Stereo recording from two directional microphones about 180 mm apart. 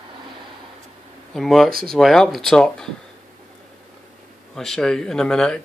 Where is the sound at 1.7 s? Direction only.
55° right (ahead or behind).